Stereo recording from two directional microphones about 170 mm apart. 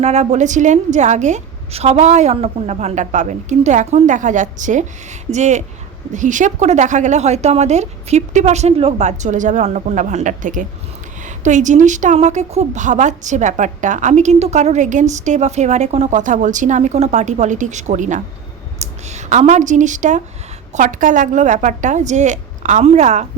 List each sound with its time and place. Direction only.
0.0 s a woman's voice: 40° right (ahead or behind)